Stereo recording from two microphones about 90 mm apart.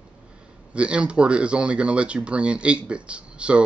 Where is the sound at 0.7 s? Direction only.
10° right (ahead or behind).